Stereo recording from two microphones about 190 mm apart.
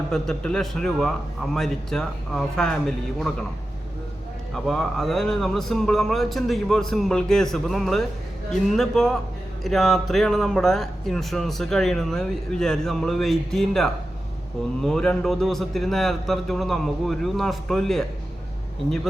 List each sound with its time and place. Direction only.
0.1 s speech: centre (ahead or behind)
4.5 s speech: centre (ahead or behind)